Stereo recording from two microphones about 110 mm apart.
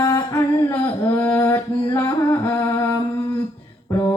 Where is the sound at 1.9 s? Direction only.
30° left (ahead or behind).